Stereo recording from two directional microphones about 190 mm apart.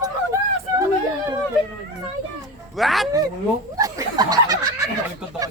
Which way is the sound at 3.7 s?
20° right (ahead or behind).